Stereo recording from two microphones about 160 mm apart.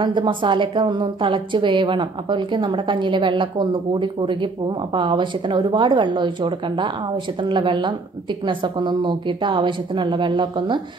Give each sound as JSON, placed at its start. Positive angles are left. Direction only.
{"t": 0.0, "sound": "a woman's voice", "side_deg": -30}